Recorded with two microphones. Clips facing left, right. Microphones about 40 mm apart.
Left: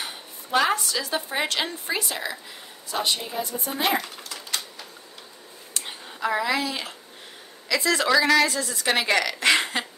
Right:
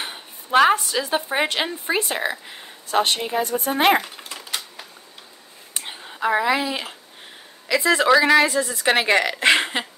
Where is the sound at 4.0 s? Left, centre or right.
Right.